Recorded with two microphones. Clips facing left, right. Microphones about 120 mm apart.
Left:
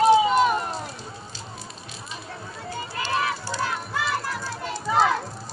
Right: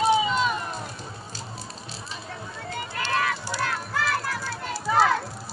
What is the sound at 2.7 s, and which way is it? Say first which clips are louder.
Run: even; 15° left (ahead or behind).